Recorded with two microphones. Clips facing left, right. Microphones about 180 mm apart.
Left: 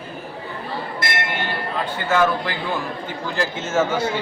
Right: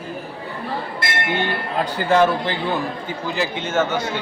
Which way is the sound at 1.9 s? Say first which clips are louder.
Right 3 dB; 35° right (ahead or behind).